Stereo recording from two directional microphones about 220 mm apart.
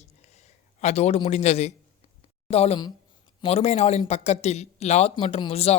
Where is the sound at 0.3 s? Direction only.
30° left (ahead or behind).